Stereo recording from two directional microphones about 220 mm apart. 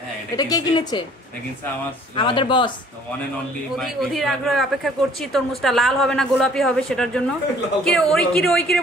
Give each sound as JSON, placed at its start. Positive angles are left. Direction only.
{"t": 0.4, "sound": "a woman's voice", "side_deg": 15}
{"t": 2.1, "sound": "speech", "side_deg": 20}
{"t": 3.7, "sound": "speech", "side_deg": 0}